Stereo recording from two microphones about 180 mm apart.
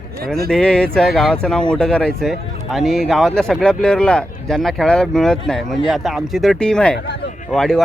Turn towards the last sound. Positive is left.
turn(degrees=5)  # may be behind; listen again after turning